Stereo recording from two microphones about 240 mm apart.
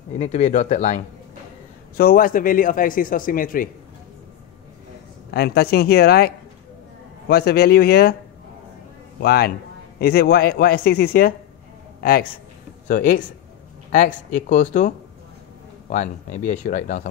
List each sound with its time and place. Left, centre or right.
0.2 s a man's voice: left
5.3 s a man's voice: left
9.2 s a man's voice: left